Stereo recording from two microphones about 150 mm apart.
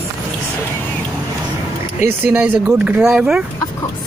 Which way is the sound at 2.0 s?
15° right (ahead or behind).